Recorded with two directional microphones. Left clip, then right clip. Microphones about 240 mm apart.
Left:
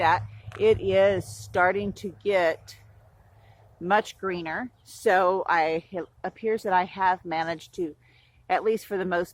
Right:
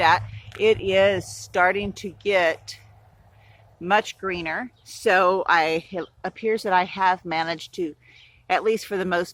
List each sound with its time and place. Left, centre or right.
0.0 s speech: centre
0.5 s speech: centre
3.8 s speech: centre